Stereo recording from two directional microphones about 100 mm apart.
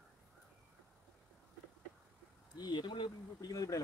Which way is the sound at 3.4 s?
35° left (ahead or behind).